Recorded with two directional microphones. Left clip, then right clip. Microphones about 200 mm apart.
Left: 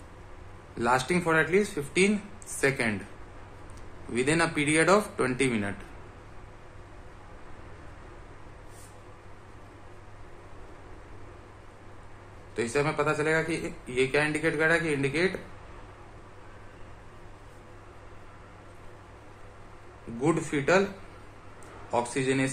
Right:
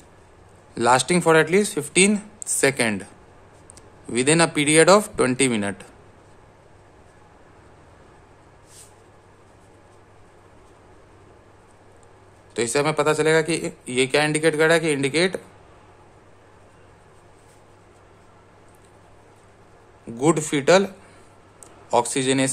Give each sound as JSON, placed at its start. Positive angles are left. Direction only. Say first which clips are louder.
{"t": 0.7, "sound": "speech", "louder": "right 8 dB", "side_deg": -50}
{"t": 4.1, "sound": "speech", "louder": "right 7 dB", "side_deg": -50}
{"t": 12.5, "sound": "speech", "louder": "right 6 dB", "side_deg": -55}
{"t": 20.2, "sound": "speech", "louder": "right 7 dB", "side_deg": -55}
{"t": 21.9, "sound": "speech", "louder": "right 7 dB", "side_deg": -55}